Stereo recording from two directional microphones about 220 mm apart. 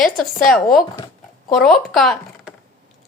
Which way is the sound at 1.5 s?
Centre (ahead or behind).